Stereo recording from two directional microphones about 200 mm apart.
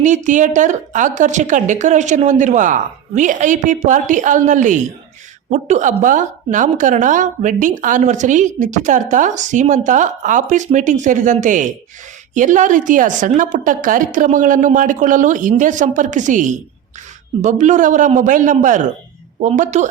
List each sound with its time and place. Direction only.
0.0 s a woman's voice: 40° right (ahead or behind)